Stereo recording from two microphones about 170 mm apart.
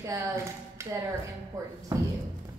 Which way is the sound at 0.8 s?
15° right (ahead or behind).